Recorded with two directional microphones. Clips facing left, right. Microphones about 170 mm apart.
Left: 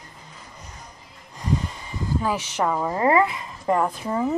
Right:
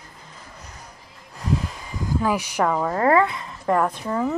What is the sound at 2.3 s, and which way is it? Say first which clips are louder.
Speech: right 4 dB; 10° right (ahead or behind).